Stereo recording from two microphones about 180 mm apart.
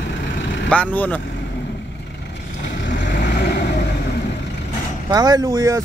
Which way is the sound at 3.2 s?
70° left (ahead or behind).